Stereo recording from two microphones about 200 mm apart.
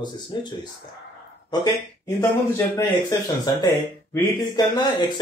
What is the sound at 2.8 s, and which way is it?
Speech, 20° left (ahead or behind).